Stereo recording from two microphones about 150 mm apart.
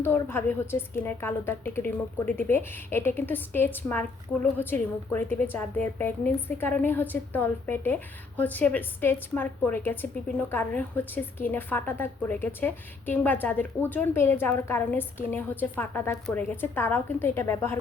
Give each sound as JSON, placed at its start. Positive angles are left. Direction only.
{"t": 0.0, "sound": "a woman's voice", "side_deg": 15}